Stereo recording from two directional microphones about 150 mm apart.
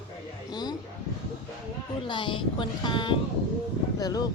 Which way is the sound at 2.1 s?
30° left (ahead or behind).